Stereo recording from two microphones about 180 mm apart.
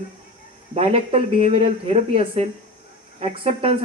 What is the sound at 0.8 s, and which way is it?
Speech, 30° right (ahead or behind).